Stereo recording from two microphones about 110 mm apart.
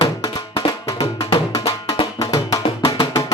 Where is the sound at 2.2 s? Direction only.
30° left (ahead or behind).